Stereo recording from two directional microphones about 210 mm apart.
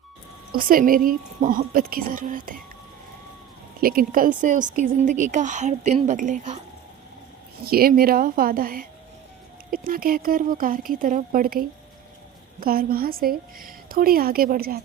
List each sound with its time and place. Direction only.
0.5 s a woman's voice: 40° right (ahead or behind)
3.8 s speech: 45° right (ahead or behind)
7.6 s a woman's voice: 45° right (ahead or behind)